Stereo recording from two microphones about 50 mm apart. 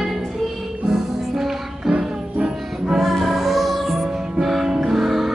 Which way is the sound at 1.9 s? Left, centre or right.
Centre.